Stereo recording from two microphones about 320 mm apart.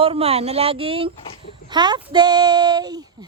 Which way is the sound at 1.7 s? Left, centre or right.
Centre.